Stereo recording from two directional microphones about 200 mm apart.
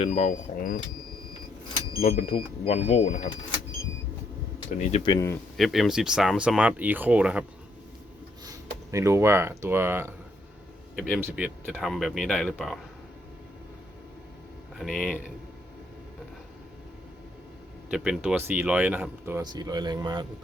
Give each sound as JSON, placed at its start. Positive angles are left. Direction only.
{"t": 0.0, "sound": "speech", "side_deg": 40}
{"t": 2.0, "sound": "speech", "side_deg": 30}
{"t": 4.8, "sound": "speech", "side_deg": 30}
{"t": 5.1, "sound": "speech", "side_deg": 15}
{"t": 5.5, "sound": "speech", "side_deg": 0}
{"t": 8.9, "sound": "speech", "side_deg": -15}
{"t": 10.9, "sound": "speech", "side_deg": 0}
{"t": 11.2, "sound": "speech", "side_deg": -10}
{"t": 14.8, "sound": "speech", "side_deg": 0}
{"t": 17.9, "sound": "speech", "side_deg": -5}